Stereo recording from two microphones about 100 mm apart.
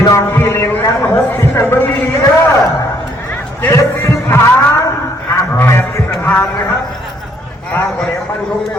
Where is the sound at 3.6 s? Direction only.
25° left (ahead or behind).